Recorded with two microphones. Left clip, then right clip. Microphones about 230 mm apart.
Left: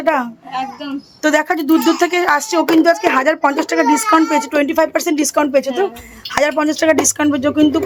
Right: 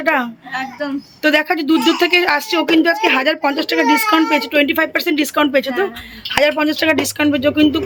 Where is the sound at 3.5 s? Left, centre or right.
Left.